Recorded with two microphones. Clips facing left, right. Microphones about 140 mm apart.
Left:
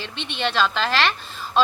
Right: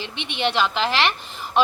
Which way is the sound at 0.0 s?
15° right (ahead or behind).